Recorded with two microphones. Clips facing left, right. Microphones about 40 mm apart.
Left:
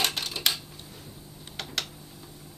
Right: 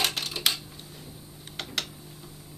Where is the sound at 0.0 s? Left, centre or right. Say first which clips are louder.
Even; centre.